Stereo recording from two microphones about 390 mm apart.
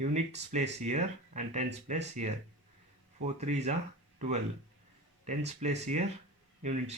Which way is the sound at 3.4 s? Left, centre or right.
Centre.